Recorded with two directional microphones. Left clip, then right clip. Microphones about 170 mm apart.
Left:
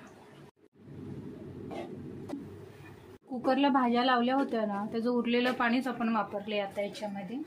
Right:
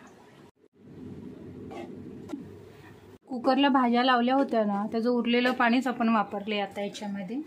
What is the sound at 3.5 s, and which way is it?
A woman's voice, 35° right (ahead or behind).